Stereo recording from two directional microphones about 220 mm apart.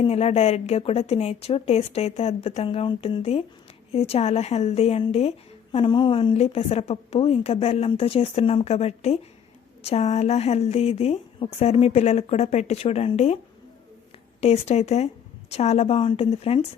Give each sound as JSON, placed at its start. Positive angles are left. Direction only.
{"t": 0.0, "sound": "a woman's voice", "side_deg": 30}
{"t": 14.4, "sound": "a woman's voice", "side_deg": 30}